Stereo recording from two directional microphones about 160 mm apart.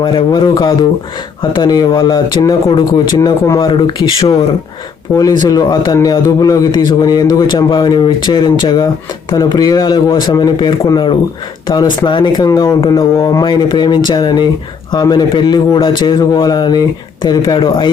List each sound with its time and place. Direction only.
0.0 s a man's voice: 30° left (ahead or behind)